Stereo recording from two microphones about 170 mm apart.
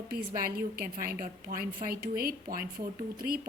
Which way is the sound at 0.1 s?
60° right (ahead or behind).